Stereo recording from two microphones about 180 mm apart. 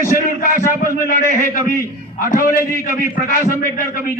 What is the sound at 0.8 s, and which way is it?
A man's voice, 50° left (ahead or behind).